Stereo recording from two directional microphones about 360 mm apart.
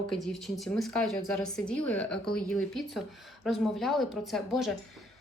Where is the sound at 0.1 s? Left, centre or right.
Centre.